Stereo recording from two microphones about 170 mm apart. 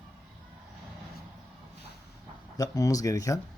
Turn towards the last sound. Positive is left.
turn(degrees=20)  # may be behind; listen again after turning